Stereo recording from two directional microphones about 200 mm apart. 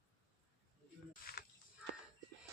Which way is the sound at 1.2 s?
45° left (ahead or behind).